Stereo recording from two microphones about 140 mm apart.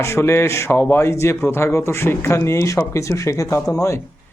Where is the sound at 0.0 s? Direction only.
20° left (ahead or behind).